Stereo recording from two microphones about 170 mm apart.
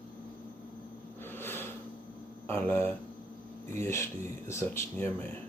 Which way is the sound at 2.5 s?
15° left (ahead or behind).